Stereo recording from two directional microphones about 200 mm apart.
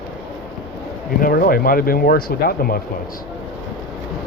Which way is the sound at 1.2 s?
45° left (ahead or behind).